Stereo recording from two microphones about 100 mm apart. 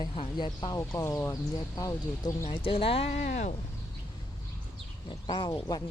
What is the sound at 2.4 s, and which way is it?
Speech, 65° left (ahead or behind).